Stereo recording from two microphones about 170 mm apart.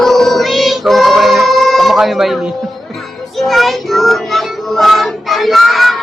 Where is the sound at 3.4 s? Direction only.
Centre (ahead or behind).